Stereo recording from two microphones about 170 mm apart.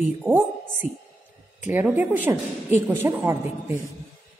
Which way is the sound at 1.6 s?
10° right (ahead or behind).